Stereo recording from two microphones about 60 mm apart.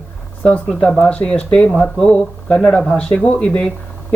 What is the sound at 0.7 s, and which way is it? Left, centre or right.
A woman's voice, centre.